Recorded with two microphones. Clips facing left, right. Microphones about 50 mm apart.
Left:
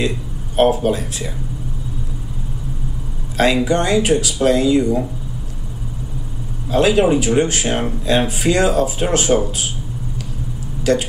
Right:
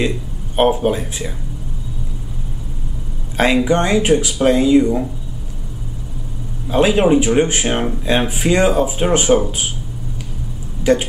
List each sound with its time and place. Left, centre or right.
0.6 s speech: centre
3.3 s speech: right
6.7 s speech: centre
10.8 s speech: centre